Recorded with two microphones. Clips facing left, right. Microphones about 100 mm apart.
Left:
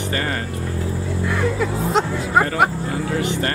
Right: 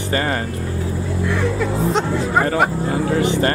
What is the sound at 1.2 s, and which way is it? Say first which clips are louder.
Speech: right 1 dB; centre (ahead or behind).